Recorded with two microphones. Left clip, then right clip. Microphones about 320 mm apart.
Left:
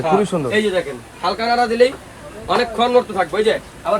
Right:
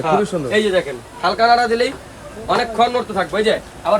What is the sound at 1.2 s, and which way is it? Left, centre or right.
A man's voice, centre.